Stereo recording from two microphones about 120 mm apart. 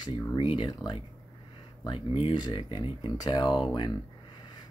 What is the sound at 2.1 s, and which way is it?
Speech, 45° left (ahead or behind).